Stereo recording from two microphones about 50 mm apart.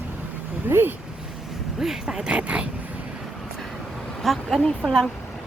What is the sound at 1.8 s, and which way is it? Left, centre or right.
Speech, centre.